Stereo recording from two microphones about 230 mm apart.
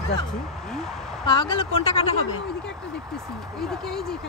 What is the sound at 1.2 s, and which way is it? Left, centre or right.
Speech, centre.